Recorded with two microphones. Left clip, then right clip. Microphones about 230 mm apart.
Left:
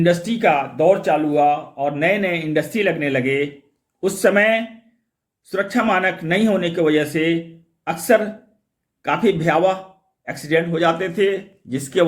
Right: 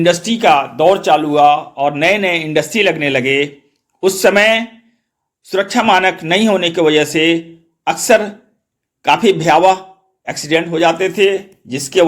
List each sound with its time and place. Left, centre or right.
0.0 s a man's voice: centre
1.3 s speech: right
1.7 s a man's voice: centre